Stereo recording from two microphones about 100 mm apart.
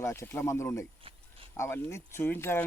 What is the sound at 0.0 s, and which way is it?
Speech, 25° left (ahead or behind).